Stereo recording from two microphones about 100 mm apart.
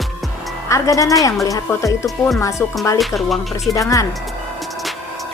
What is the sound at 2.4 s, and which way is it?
Music, 30° left (ahead or behind).